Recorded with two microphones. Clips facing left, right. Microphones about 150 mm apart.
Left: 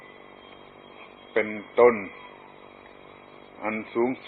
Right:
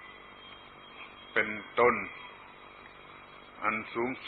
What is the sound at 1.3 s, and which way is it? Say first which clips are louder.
Speech: left 9 dB; 40° left (ahead or behind).